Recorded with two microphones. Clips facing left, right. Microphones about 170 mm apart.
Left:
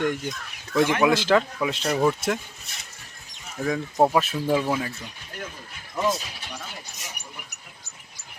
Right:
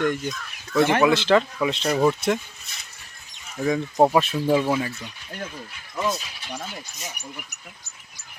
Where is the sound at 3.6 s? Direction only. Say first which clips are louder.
Right 2 dB; 5° right (ahead or behind).